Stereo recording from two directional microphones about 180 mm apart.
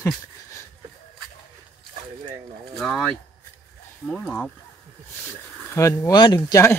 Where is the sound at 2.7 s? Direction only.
5° left (ahead or behind).